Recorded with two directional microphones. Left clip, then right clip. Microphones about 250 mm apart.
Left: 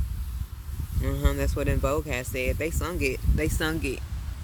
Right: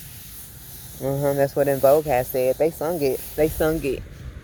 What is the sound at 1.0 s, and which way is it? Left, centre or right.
Speech, centre.